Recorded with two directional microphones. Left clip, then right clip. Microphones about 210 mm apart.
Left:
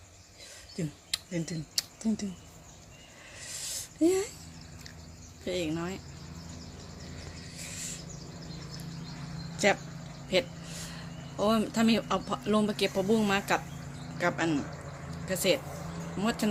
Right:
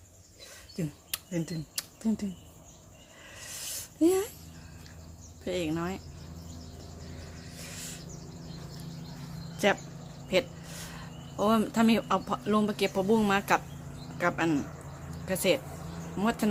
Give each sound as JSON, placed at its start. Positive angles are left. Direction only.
{"t": 0.8, "sound": "speech", "side_deg": -5}
{"t": 3.7, "sound": "a sound", "side_deg": -5}
{"t": 5.5, "sound": "speech", "side_deg": -5}
{"t": 10.2, "sound": "speech", "side_deg": -5}